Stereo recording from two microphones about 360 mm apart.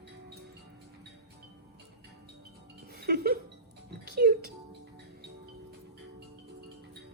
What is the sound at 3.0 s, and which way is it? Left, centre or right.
Music, right.